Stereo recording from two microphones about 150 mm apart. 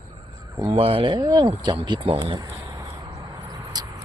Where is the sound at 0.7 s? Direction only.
40° right (ahead or behind).